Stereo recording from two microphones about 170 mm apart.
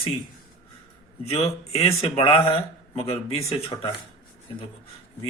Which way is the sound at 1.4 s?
35° left (ahead or behind).